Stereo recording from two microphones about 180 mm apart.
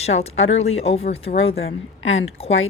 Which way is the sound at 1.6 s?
90° left.